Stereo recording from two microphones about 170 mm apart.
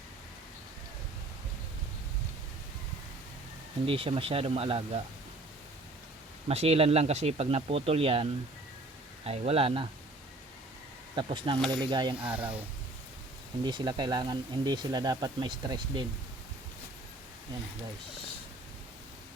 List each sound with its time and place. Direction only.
3.8 s speech: 35° right (ahead or behind)
6.5 s speech: 35° right (ahead or behind)
11.1 s speech: 30° right (ahead or behind)
12.3 s speech: 10° right (ahead or behind)
13.7 s speech: 25° right (ahead or behind)